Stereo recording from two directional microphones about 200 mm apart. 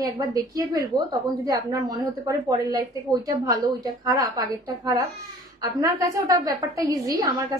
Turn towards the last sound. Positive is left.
turn(degrees=-15)  # may be behind; listen again after turning